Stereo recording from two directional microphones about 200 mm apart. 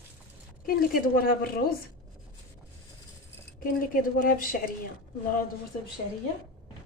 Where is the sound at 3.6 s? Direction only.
45° left (ahead or behind).